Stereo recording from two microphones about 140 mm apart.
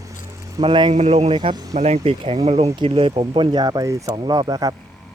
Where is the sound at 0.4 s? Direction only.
25° right (ahead or behind).